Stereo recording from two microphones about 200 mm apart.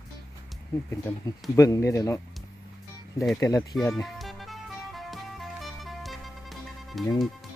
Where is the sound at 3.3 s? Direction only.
15° left (ahead or behind).